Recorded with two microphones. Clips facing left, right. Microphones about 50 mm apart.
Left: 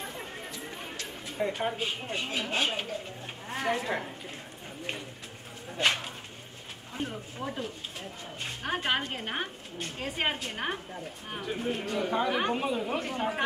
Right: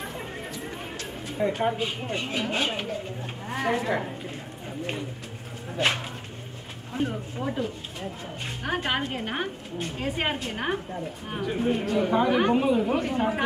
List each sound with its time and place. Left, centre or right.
0.0 s a sound: centre
1.4 s speech: centre
6.9 s a woman's voice: centre